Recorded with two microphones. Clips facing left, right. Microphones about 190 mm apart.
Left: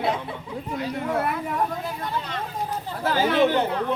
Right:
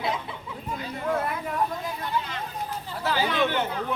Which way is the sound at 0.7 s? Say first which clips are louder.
Left 2 dB; 70° left (ahead or behind).